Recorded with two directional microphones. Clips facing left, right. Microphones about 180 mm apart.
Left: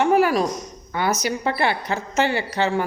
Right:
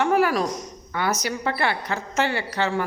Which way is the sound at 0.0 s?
15° left (ahead or behind).